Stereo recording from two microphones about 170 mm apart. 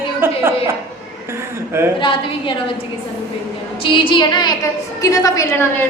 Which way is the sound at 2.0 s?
30° left (ahead or behind).